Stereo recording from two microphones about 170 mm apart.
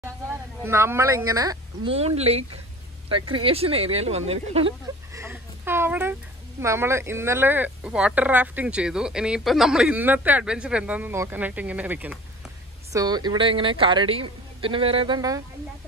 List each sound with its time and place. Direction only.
0.7 s speech: 15° right (ahead or behind)
1.9 s speech: 35° right (ahead or behind)
5.1 s speech: 15° right (ahead or behind)
12.9 s a woman's voice: 25° right (ahead or behind)